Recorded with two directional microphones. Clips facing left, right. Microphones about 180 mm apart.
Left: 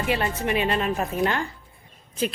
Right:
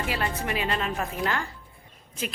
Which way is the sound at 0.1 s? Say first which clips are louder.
Left 8 dB; 20° left (ahead or behind).